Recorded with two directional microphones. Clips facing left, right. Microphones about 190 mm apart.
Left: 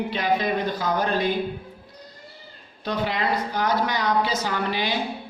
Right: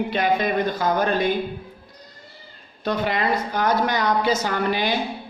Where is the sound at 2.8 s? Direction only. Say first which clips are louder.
Right 3 dB; 50° right (ahead or behind).